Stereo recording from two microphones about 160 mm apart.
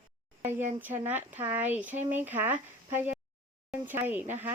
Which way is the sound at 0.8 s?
10° right (ahead or behind).